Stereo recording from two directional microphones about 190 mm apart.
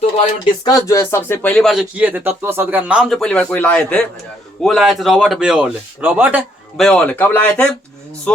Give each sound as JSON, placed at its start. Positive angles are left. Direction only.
{"t": 0.6, "sound": "speech", "side_deg": 20}
{"t": 6.8, "sound": "speech", "side_deg": 5}